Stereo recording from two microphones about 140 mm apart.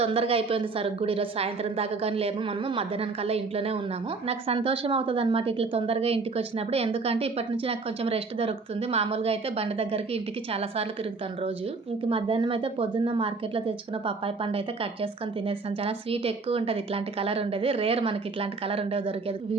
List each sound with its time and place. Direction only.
0.0 s a woman's voice: 40° right (ahead or behind)
12.0 s a woman's voice: 40° right (ahead or behind)